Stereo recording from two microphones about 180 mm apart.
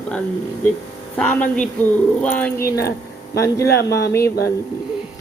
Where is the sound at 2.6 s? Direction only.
60° left (ahead or behind).